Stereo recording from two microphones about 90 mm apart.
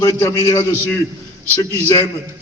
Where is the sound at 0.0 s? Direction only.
35° left (ahead or behind).